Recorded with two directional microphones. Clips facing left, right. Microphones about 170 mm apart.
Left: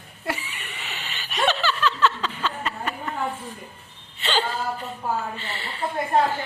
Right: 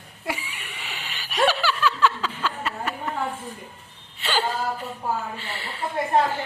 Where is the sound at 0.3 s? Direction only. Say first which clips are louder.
Left 1 dB; 10° right (ahead or behind).